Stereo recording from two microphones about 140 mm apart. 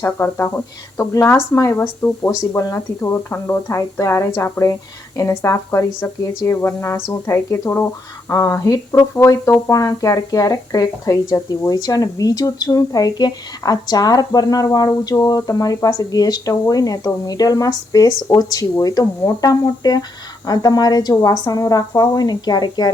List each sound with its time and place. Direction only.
0.0 s speech: 15° left (ahead or behind)